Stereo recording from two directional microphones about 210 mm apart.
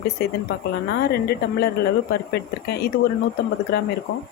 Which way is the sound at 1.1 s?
50° left (ahead or behind).